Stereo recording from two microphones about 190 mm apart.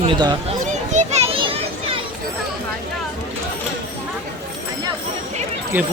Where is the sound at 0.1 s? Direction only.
20° right (ahead or behind).